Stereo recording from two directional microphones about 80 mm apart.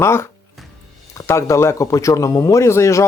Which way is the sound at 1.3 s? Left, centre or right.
Left.